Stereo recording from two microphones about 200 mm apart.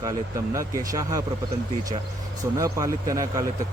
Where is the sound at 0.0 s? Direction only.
15° right (ahead or behind).